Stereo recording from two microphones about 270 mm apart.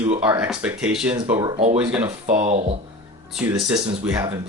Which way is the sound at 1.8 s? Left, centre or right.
Centre.